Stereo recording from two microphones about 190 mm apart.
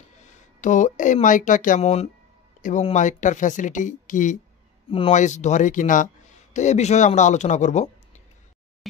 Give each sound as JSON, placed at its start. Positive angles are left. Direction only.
{"t": 0.2, "sound": "speech", "side_deg": 40}